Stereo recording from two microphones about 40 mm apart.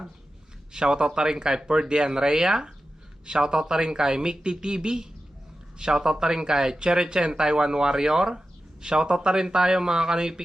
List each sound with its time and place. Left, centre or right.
0.7 s speech: centre